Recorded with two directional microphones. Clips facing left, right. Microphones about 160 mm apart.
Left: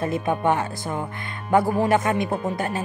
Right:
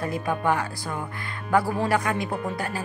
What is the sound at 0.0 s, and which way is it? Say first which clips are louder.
Speech: left 3 dB; 25° left (ahead or behind).